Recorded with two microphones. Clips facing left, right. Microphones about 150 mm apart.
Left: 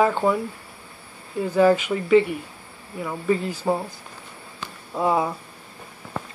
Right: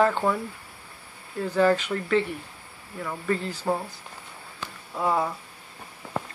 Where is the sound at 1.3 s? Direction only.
10° left (ahead or behind).